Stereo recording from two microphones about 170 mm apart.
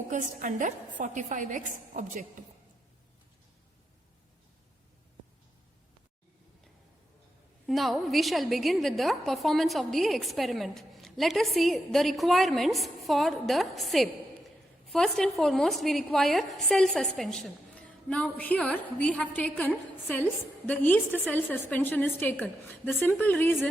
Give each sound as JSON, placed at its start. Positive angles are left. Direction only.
{"t": 0.1, "sound": "a woman's voice", "side_deg": -50}
{"t": 7.7, "sound": "a woman's voice", "side_deg": 0}